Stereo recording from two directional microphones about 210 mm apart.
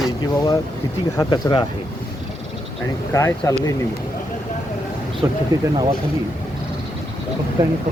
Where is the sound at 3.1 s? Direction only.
15° left (ahead or behind).